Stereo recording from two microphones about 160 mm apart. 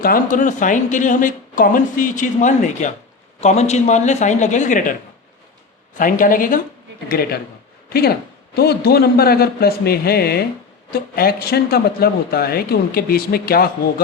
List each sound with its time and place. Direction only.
0.0 s a woman's voice: 60° left (ahead or behind)
7.1 s a man's voice: 75° left (ahead or behind)
8.5 s a man's voice: 80° left